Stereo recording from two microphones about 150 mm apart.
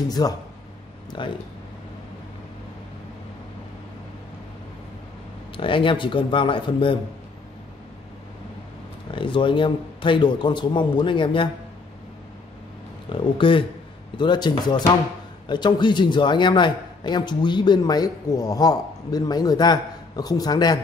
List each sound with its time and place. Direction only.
0.2 s a man's voice: 30° left (ahead or behind)
5.6 s a man's voice: 35° left (ahead or behind)
9.1 s a man's voice: 35° left (ahead or behind)
13.1 s a man's voice: 35° left (ahead or behind)